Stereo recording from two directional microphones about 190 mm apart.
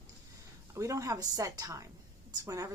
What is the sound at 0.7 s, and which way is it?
A woman's voice, 15° right (ahead or behind).